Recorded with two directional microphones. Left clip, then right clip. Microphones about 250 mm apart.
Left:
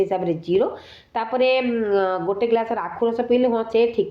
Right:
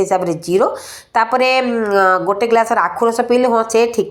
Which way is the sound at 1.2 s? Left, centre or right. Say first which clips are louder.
Right 5 dB; centre.